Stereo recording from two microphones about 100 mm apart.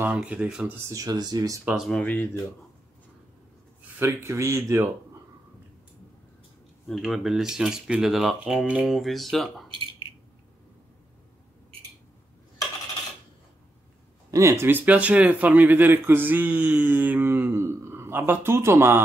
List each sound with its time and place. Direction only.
0.0 s speech: 15° right (ahead or behind)
0.8 s speech: 35° right (ahead or behind)
2.0 s speech: 15° left (ahead or behind)
4.0 s speech: 25° right (ahead or behind)
6.9 s speech: centre (ahead or behind)
14.3 s speech: 30° right (ahead or behind)